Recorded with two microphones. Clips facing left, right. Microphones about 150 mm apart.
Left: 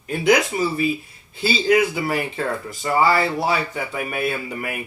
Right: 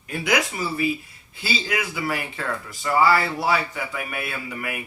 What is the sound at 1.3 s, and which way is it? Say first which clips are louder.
Speech: left 9 dB; 25° left (ahead or behind).